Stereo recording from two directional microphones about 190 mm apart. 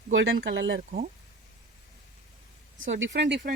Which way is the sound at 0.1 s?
90° right.